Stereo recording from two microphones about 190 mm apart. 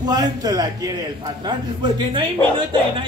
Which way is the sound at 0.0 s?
20° right (ahead or behind).